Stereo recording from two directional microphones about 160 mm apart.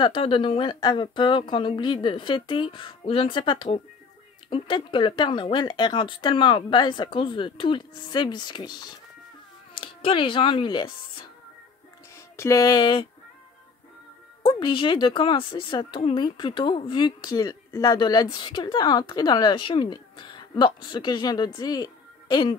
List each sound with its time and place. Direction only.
0.0 s speech: 35° left (ahead or behind)
12.4 s speech: 20° left (ahead or behind)
14.4 s speech: 30° left (ahead or behind)